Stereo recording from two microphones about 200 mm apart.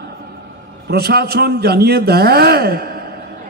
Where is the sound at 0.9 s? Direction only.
50° right (ahead or behind).